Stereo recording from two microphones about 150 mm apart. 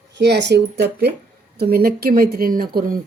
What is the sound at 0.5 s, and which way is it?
A woman's voice, 90° right.